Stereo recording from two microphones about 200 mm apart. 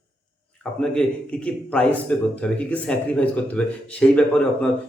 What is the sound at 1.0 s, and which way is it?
A man's voice, 5° left (ahead or behind).